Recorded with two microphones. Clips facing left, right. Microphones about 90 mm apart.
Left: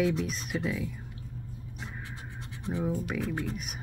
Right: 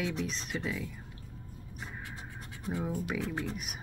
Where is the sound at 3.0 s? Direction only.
15° right (ahead or behind).